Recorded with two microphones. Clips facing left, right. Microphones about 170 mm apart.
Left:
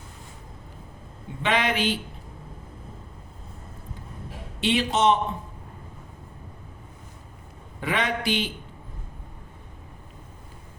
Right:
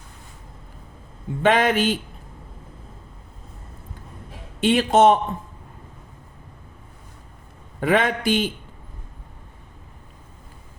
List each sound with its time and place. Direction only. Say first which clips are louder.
1.4 s a man's voice: right 6 dB; 45° right (ahead or behind)
4.6 s a man's voice: right 6 dB; 50° right (ahead or behind)
7.8 s a man's voice: right 7 dB; 50° right (ahead or behind)